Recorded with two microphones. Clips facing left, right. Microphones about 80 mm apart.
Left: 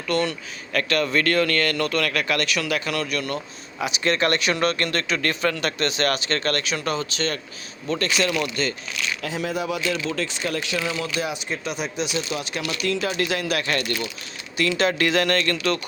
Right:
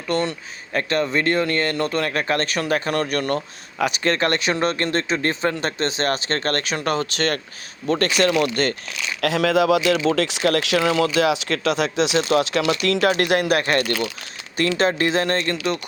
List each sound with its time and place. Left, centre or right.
0.1 s speech: right
9.2 s speech: right
12.8 s speech: right; by 15.8 s centre